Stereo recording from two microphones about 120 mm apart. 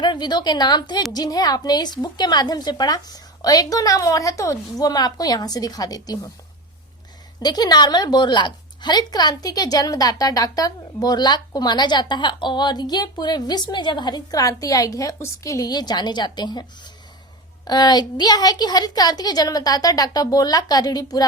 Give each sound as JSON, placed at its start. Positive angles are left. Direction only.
{"t": 0.0, "sound": "a woman's voice", "side_deg": 40}
{"t": 7.4, "sound": "a woman's voice", "side_deg": 35}